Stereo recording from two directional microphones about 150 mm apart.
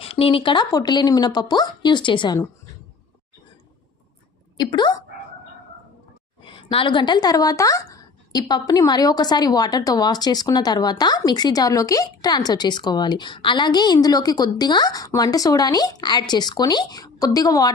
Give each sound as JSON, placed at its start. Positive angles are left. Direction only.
{"t": 0.0, "sound": "a woman's voice", "side_deg": 40}
{"t": 4.5, "sound": "speech", "side_deg": 30}
{"t": 6.4, "sound": "a woman's voice", "side_deg": 35}